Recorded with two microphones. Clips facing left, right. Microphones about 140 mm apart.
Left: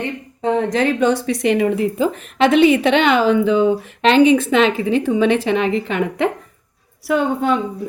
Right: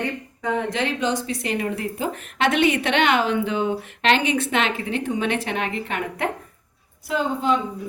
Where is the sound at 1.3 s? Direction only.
85° left.